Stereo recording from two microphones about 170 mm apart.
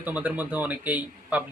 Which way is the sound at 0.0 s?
10° right (ahead or behind).